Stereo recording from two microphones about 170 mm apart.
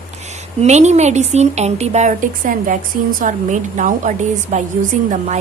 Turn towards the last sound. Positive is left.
turn(degrees=-45)  # may be behind; listen again after turning